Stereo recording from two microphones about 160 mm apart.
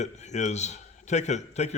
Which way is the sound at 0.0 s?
45° left (ahead or behind).